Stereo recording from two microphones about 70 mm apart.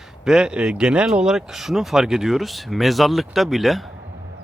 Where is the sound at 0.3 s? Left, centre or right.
Centre.